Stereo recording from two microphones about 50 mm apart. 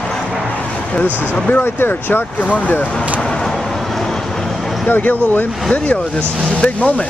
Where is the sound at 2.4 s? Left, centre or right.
Left.